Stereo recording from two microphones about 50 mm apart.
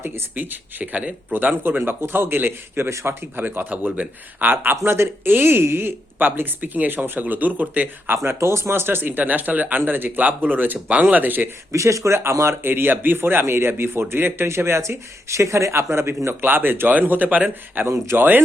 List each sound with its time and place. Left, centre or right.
0.3 s a man's voice: right
3.7 s speech: right
4.5 s a man's voice: right
8.1 s speech: right
11.7 s speech: right
12.6 s a man's voice: right
13.4 s speech: right
16.5 s speech: right
17.8 s speech: right